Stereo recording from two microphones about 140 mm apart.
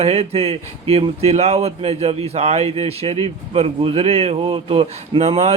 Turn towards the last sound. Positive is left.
turn(degrees=-50)  # may be behind; listen again after turning